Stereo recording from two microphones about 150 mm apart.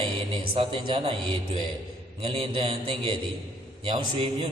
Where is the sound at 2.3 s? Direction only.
35° right (ahead or behind).